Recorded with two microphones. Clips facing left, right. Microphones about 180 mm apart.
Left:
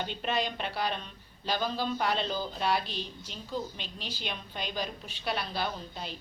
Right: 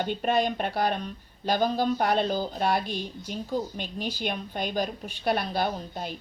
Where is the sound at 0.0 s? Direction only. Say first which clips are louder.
Right 7 dB; 50° right (ahead or behind).